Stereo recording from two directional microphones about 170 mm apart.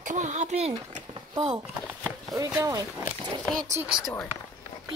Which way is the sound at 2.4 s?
20° right (ahead or behind).